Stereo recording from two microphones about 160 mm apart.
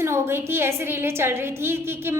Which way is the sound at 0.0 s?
15° right (ahead or behind).